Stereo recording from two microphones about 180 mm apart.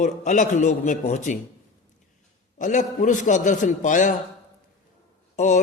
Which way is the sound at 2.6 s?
45° left (ahead or behind).